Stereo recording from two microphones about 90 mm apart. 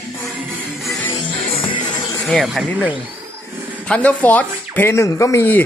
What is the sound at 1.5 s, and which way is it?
Music, 85° left.